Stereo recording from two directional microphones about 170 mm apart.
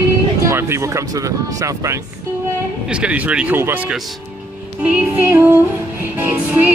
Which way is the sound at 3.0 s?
5° right (ahead or behind).